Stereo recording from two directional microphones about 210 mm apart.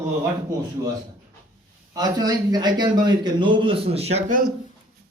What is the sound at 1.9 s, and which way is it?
A man's voice, 20° right (ahead or behind).